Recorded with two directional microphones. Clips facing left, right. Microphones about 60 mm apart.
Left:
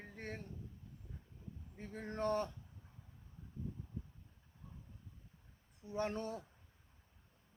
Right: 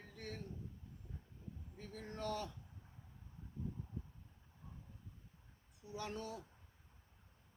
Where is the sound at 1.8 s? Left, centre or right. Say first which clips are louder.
Left 6 dB; left.